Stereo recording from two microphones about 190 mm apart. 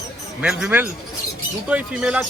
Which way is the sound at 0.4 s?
5° right (ahead or behind).